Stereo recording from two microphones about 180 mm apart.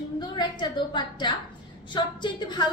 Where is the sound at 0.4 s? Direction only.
25° left (ahead or behind).